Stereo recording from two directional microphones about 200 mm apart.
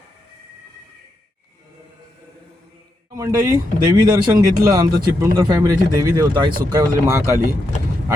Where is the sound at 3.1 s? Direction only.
15° right (ahead or behind).